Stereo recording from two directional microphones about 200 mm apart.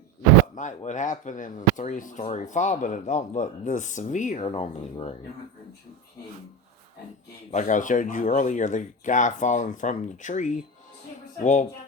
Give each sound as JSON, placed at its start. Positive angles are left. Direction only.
{"t": 0.5, "sound": "speech", "side_deg": 40}
{"t": 7.5, "sound": "speech", "side_deg": 40}